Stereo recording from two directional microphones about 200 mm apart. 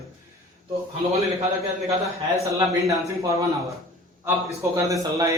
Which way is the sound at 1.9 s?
15° right (ahead or behind).